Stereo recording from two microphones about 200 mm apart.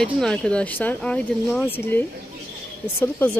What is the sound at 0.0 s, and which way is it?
A woman's voice, 5° left (ahead or behind).